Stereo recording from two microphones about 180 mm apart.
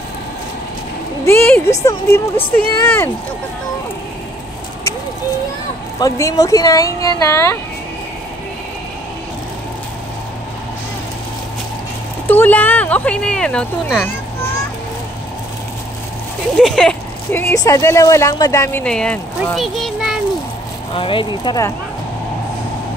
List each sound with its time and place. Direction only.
1.2 s speech: 10° left (ahead or behind)
5.9 s speech: 20° left (ahead or behind)
12.3 s speech: 10° left (ahead or behind)
16.5 s speech: centre (ahead or behind)
20.9 s speech: 30° left (ahead or behind)